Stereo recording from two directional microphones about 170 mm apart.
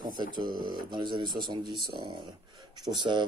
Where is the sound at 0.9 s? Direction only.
25° right (ahead or behind).